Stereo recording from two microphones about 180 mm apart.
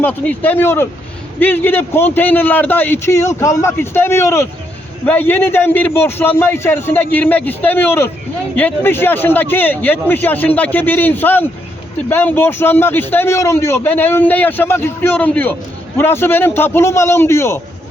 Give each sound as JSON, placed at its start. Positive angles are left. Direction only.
{"t": 0.0, "sound": "a man's voice", "side_deg": 10}